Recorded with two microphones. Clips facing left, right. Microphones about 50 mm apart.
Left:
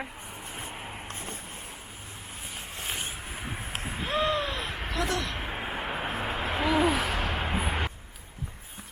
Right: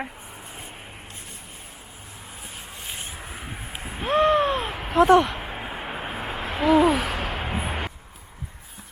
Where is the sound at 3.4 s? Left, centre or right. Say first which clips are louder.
Left 3 dB; centre.